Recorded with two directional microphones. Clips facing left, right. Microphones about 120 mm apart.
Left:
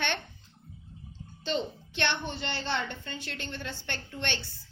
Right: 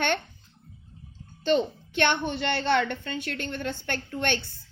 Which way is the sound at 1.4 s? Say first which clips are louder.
Right 8 dB; 55° right (ahead or behind).